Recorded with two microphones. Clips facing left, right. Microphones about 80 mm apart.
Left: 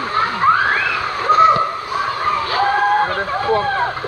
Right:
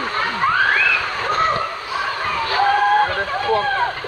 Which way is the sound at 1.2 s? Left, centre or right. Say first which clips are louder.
Left 8 dB; centre.